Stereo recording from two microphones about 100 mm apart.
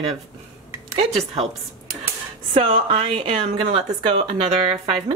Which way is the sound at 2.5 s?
65° right (ahead or behind).